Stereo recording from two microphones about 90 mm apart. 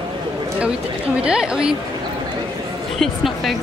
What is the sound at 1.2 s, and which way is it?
Speech, 10° right (ahead or behind).